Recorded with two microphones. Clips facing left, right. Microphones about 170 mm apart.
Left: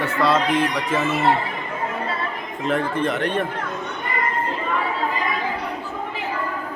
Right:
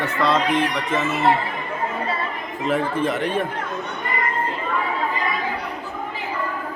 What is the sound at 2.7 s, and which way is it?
Speech, 5° right (ahead or behind).